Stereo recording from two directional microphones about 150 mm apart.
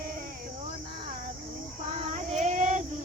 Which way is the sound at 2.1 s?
50° right (ahead or behind).